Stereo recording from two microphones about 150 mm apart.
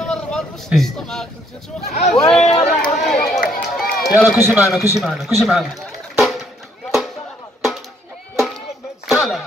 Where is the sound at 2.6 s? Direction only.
5° left (ahead or behind).